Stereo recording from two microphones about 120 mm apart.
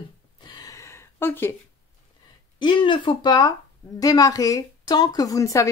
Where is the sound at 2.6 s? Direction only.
40° left (ahead or behind).